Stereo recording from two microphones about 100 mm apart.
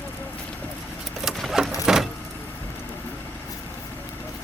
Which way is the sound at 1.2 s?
Centre (ahead or behind).